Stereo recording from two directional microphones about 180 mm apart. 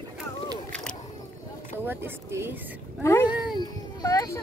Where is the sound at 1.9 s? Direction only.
15° right (ahead or behind).